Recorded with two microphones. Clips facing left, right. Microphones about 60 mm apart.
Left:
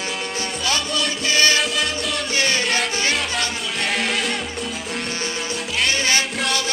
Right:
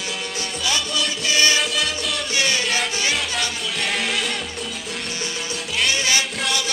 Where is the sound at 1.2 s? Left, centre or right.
Left.